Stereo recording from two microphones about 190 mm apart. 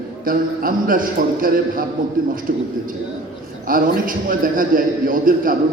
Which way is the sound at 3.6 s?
45° right (ahead or behind).